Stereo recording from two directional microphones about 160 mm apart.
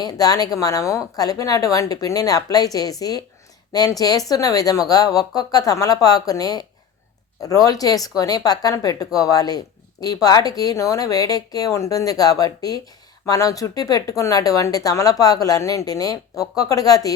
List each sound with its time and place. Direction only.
0.0 s a woman's voice: 25° left (ahead or behind)